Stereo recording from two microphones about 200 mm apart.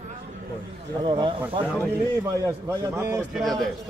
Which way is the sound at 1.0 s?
25° right (ahead or behind).